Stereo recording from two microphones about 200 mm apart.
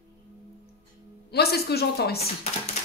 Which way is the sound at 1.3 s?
55° left (ahead or behind).